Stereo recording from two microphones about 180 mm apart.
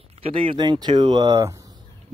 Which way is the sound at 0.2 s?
30° right (ahead or behind).